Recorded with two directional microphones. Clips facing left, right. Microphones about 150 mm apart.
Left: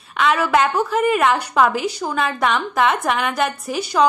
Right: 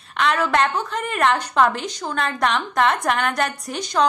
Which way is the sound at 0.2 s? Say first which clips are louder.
Left 2 dB; 5° left (ahead or behind).